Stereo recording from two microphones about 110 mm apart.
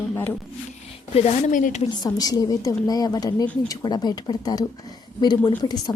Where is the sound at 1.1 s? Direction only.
80° left.